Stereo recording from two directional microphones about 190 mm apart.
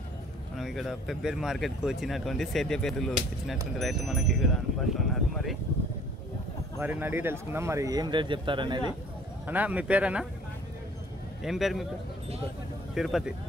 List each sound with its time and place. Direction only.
0.6 s speech: centre (ahead or behind)
6.8 s speech: 10° right (ahead or behind)
9.5 s a man's voice: 10° right (ahead or behind)
11.4 s speech: centre (ahead or behind)
12.9 s speech: centre (ahead or behind)